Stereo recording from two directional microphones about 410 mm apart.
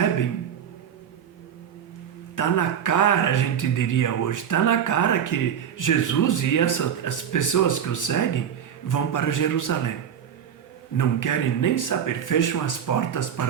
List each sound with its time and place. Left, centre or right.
2.3 s speech: left
10.9 s speech: left